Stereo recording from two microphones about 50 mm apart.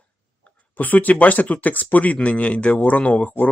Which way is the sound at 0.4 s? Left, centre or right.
Left.